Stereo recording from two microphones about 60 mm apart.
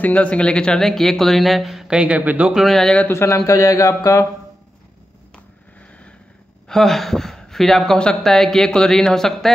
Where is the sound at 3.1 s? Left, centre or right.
Left.